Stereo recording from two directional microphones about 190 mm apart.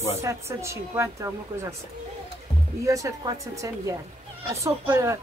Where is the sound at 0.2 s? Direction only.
15° right (ahead or behind).